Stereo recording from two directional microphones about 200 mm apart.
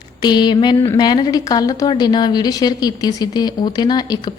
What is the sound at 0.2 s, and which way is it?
A woman's voice, 20° left (ahead or behind).